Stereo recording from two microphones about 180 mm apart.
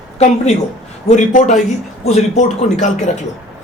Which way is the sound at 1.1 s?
40° left (ahead or behind).